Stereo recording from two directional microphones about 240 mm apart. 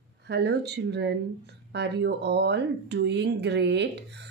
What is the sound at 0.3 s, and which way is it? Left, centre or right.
A woman's voice, right.